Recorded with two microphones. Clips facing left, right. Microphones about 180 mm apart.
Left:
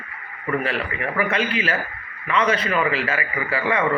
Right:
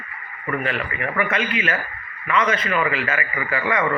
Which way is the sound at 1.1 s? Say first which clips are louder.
Left 1 dB; 35° left (ahead or behind).